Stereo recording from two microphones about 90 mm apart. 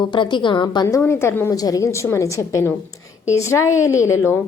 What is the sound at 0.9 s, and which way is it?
Speech, 30° left (ahead or behind).